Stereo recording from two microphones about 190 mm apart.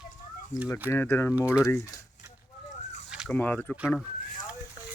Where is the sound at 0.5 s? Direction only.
40° left (ahead or behind).